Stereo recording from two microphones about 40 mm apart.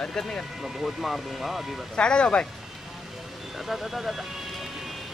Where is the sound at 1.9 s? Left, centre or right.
Left.